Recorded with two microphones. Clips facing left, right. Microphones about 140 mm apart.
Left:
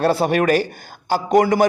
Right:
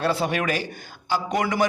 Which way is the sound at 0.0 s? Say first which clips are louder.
Left 7 dB; 45° left (ahead or behind).